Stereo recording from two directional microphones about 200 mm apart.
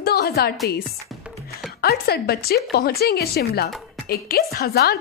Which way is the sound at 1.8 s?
50° left (ahead or behind).